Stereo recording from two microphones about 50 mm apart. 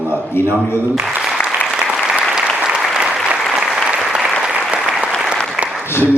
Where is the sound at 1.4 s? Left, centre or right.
Left.